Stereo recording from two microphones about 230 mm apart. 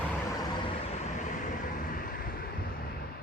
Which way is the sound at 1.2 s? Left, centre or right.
Left.